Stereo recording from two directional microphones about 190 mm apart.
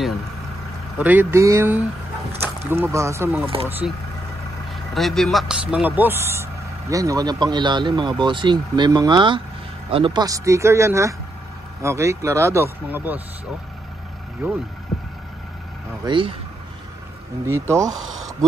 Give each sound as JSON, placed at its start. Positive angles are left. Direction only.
{"t": 0.9, "sound": "speech", "side_deg": -10}
{"t": 4.9, "sound": "speech", "side_deg": 0}
{"t": 16.1, "sound": "speech", "side_deg": -25}
{"t": 17.5, "sound": "speech", "side_deg": -15}